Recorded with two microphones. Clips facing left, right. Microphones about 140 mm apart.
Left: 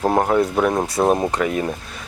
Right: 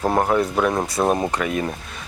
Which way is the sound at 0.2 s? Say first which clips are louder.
Left 2 dB; 30° left (ahead or behind).